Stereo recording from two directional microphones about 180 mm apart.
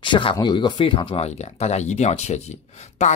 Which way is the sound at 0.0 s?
30° left (ahead or behind).